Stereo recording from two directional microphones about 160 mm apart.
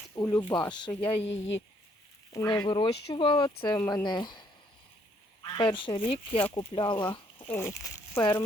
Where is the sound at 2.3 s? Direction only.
20° left (ahead or behind).